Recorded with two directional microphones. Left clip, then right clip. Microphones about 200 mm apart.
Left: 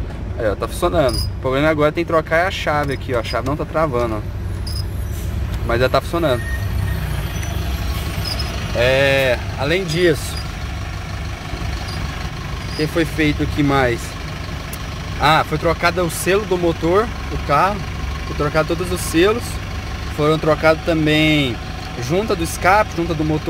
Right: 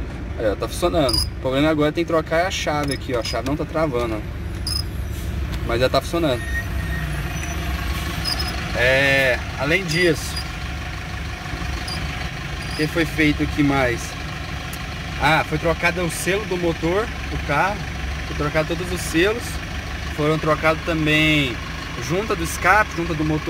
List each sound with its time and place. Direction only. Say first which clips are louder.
0.5 s speech: left 2 dB; 5° left (ahead or behind)
5.7 s speech: left 3 dB; 5° left (ahead or behind)
8.8 s speech: left 2 dB; 15° left (ahead or behind)
12.9 s speech: left 1 dB; 20° left (ahead or behind)
15.2 s speech: left 3 dB; 20° left (ahead or behind)
20.2 s speech: left 4 dB; 20° left (ahead or behind)